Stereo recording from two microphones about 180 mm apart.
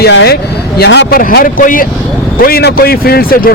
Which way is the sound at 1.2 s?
50° left (ahead or behind).